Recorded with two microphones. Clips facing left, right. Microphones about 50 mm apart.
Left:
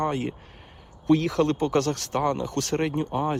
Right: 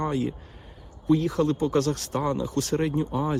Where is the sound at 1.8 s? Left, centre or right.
Left.